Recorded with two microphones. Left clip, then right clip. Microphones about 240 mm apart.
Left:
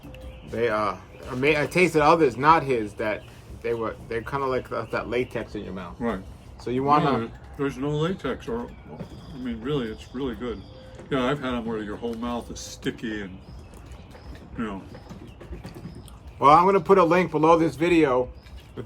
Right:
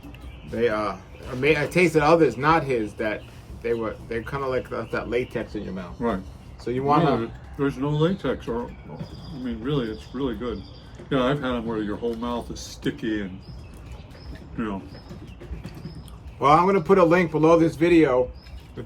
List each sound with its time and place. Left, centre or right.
0.5 s speech: centre
7.2 s speech: centre
16.4 s speech: centre